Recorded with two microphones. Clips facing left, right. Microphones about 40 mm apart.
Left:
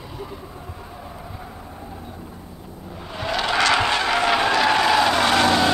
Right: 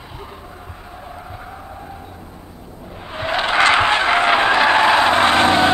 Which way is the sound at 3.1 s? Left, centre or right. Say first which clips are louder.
Right 4 dB; right.